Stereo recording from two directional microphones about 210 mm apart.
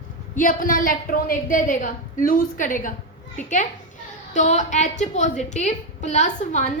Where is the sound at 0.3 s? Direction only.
40° left (ahead or behind).